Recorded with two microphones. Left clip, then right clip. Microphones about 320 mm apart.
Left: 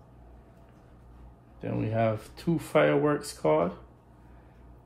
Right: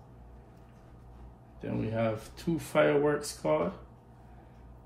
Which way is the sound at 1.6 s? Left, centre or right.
Left.